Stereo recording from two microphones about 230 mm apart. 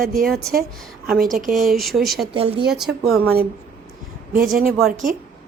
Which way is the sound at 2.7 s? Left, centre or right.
Centre.